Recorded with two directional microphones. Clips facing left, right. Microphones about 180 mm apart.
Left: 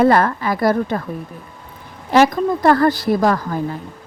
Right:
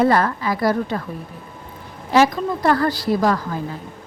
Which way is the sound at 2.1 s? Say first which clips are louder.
Left 3 dB; 55° left (ahead or behind).